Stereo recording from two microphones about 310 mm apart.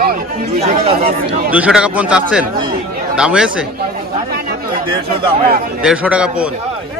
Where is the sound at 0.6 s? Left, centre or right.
Centre.